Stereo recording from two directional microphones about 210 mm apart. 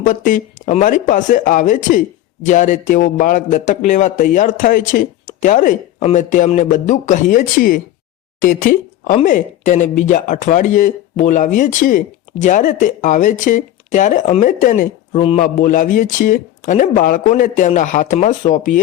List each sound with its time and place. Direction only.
0.0 s speech: 40° left (ahead or behind)
15.2 s a man's voice: 25° left (ahead or behind)
15.4 s speech: 40° left (ahead or behind)